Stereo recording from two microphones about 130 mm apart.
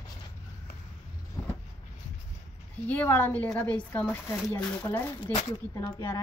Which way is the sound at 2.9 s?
15° left (ahead or behind).